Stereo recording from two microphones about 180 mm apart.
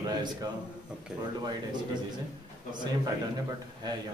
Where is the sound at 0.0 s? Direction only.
20° right (ahead or behind).